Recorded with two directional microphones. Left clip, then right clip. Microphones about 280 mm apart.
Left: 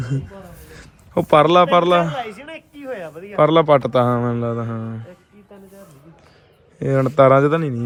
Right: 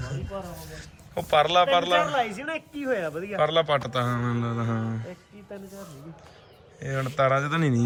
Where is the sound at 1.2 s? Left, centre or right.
Left.